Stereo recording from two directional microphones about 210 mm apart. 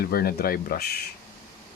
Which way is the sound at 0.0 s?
45° left (ahead or behind).